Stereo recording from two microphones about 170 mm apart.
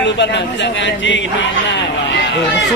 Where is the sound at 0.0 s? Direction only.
90° left.